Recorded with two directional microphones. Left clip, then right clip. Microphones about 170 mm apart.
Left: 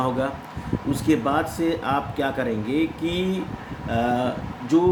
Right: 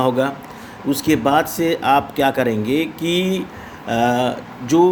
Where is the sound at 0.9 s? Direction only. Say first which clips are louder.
Right 6 dB; 55° right (ahead or behind).